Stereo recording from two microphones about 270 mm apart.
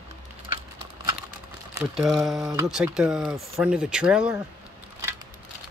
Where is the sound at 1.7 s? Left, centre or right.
Centre.